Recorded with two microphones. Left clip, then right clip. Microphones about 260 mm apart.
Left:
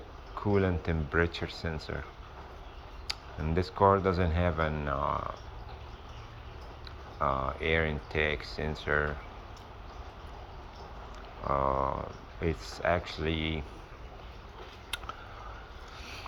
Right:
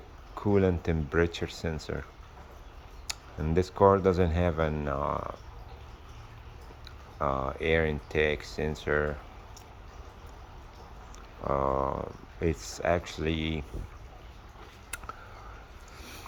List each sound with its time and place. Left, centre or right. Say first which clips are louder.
0.3 s speech: right 3 dB; right
3.1 s speech: right 1 dB; right
7.2 s speech: even; right
11.4 s speech: right 1 dB; right
14.8 s a sound: left 2 dB; centre